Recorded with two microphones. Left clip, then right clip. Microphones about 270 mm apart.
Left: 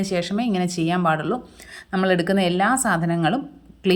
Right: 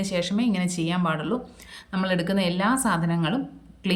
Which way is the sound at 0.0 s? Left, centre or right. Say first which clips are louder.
Left 2 dB; centre.